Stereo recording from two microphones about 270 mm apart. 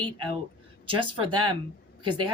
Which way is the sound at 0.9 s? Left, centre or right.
Centre.